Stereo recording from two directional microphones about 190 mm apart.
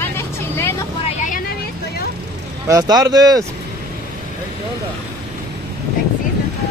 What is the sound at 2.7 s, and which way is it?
Speech, 20° right (ahead or behind).